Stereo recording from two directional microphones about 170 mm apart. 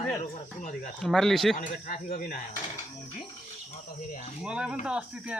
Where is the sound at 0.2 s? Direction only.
45° left (ahead or behind).